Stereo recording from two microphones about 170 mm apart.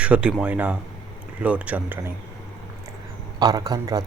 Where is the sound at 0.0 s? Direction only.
5° right (ahead or behind).